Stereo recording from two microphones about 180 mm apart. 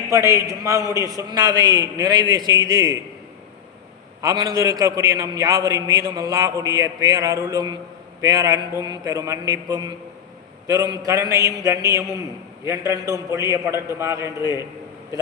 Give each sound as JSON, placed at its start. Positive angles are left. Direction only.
{"t": 0.1, "sound": "a man's voice", "side_deg": -15}
{"t": 4.2, "sound": "a man's voice", "side_deg": -20}